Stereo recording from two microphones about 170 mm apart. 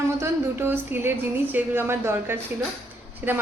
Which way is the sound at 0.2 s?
15° right (ahead or behind).